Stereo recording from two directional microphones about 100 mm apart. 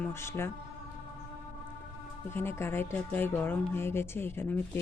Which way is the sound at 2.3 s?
25° left (ahead or behind).